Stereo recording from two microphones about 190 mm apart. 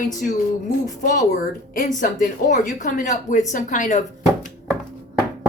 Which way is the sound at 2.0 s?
40° left (ahead or behind).